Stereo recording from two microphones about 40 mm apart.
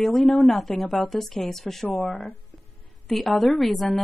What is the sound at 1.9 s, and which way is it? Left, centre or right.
Speech, left.